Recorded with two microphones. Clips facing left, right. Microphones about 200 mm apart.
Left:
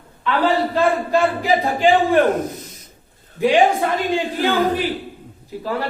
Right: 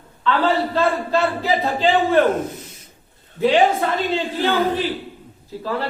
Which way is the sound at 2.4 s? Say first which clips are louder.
Left 1 dB; 40° left (ahead or behind).